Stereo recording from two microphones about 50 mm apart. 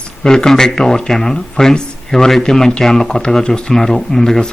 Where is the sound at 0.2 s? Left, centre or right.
Centre.